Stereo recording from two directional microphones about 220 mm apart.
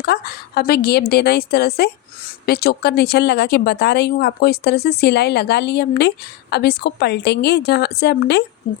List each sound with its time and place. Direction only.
0.0 s a woman's voice: 45° left (ahead or behind)